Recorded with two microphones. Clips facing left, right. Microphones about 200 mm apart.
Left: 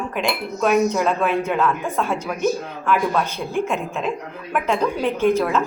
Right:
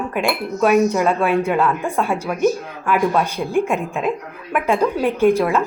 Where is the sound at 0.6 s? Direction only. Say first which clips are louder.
Right 3 dB; 5° right (ahead or behind).